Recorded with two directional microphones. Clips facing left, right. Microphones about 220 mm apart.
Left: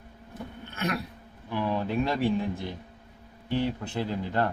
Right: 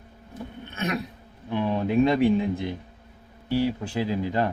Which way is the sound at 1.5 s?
20° right (ahead or behind).